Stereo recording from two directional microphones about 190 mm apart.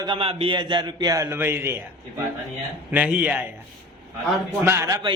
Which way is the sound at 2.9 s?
10° right (ahead or behind).